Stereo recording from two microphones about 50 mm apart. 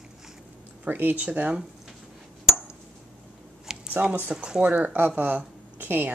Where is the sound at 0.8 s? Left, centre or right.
Right.